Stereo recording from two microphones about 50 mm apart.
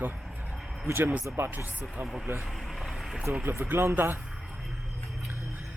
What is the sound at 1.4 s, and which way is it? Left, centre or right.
Speech, right.